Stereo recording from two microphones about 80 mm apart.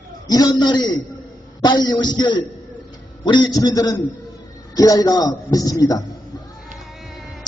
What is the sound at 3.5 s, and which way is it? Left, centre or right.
A man's voice, left.